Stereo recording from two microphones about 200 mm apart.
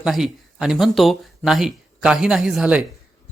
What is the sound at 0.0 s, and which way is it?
A man's voice, centre (ahead or behind).